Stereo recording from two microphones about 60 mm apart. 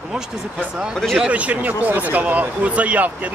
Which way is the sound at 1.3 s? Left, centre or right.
Right.